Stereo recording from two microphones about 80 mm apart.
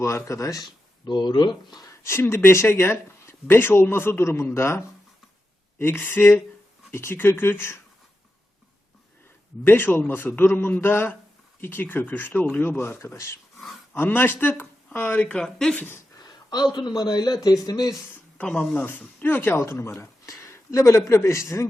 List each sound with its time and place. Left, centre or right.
0.0 s speech: left
0.6 s speech: left
2.0 s speech: left
9.6 s speech: left
15.4 s speech: centre
15.7 s speech: left
16.7 s a man's voice: left
18.3 s speech: centre; by 20.3 s left
20.4 s a sound: left
21.2 s speech: left